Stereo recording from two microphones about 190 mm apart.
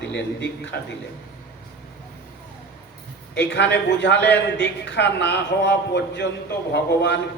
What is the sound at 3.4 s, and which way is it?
A man's voice, 65° left (ahead or behind).